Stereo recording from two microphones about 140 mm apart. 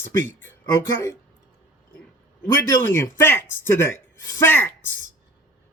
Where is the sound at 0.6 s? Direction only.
20° left (ahead or behind).